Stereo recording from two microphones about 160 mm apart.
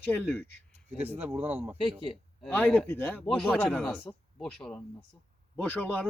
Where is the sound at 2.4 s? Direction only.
10° left (ahead or behind).